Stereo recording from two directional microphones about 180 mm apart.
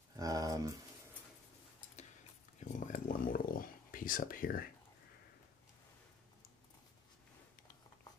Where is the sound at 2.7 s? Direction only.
45° left (ahead or behind).